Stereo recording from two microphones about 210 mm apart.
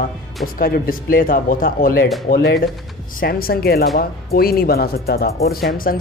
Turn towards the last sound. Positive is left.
turn(degrees=45)  # may be behind; listen again after turning